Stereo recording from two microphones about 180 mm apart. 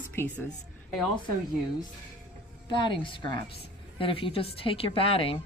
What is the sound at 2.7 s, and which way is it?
A woman's voice, 25° left (ahead or behind).